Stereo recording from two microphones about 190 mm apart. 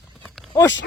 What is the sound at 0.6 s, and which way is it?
Speech, 20° left (ahead or behind).